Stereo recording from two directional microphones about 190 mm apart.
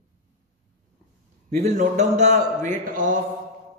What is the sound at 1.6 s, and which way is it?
A man's voice, 40° right (ahead or behind).